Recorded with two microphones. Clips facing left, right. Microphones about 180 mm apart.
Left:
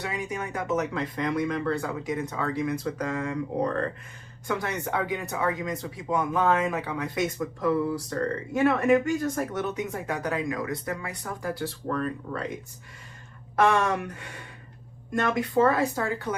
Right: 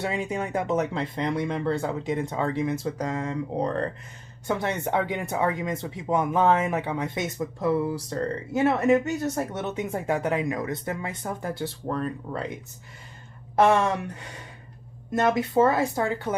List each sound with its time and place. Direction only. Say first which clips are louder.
0.0 s speech: right 4 dB; 25° right (ahead or behind)
13.6 s speech: right 2 dB; 25° right (ahead or behind)
15.3 s speech: right 1 dB; 25° right (ahead or behind)